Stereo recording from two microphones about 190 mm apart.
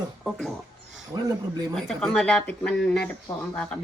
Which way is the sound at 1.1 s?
20° right (ahead or behind).